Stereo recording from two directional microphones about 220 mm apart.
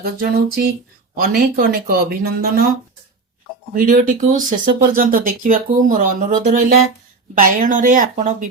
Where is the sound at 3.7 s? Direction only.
40° right (ahead or behind).